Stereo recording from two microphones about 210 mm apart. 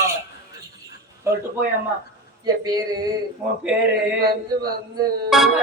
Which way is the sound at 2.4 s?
20° right (ahead or behind).